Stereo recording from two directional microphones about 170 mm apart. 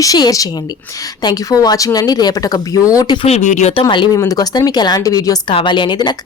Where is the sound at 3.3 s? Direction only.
45° left (ahead or behind).